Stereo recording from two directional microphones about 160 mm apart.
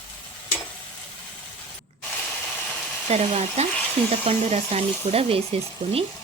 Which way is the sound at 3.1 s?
40° right (ahead or behind).